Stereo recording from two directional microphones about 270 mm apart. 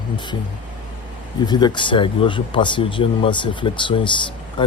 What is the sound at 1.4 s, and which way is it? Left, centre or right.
Speech, centre.